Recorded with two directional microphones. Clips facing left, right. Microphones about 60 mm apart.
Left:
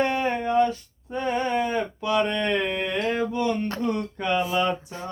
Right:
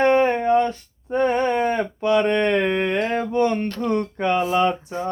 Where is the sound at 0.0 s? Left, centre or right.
Right.